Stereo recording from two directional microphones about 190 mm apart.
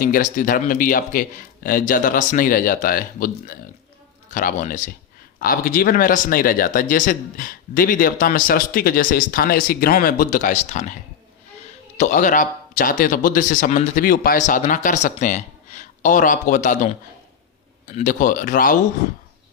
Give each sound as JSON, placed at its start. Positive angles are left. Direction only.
{"t": 0.0, "sound": "speech", "side_deg": 45}
{"t": 11.9, "sound": "speech", "side_deg": 40}